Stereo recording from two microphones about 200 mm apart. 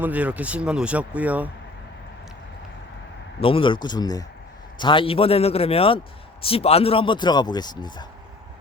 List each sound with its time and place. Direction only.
0.0 s speech: 5° right (ahead or behind)
3.4 s a man's voice: 25° left (ahead or behind)